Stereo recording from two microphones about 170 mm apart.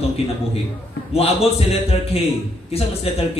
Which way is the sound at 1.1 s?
35° left (ahead or behind).